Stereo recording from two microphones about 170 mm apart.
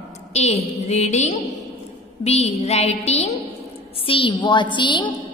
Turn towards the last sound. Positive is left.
turn(degrees=25)  # may be behind; listen again after turning